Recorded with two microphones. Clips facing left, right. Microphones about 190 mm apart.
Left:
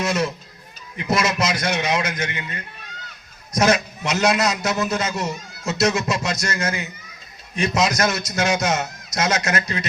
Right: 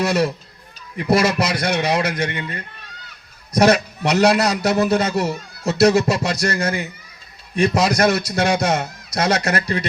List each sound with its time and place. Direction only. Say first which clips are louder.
0.0 s a man's voice: right 4 dB; 35° right (ahead or behind)
3.5 s a man's voice: right 4 dB; 35° right (ahead or behind)